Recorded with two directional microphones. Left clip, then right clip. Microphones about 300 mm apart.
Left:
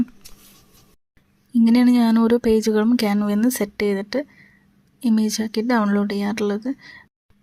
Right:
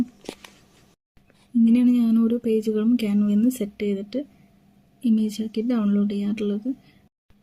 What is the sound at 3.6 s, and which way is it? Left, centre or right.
Speech, left.